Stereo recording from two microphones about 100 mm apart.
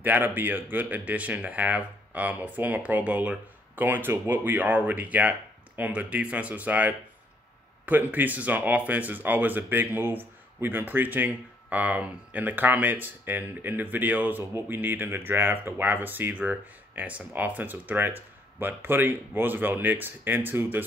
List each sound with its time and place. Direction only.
0.0 s speech: 15° right (ahead or behind)